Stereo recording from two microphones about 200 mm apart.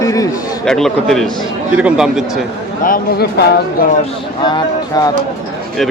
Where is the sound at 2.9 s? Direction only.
50° left (ahead or behind).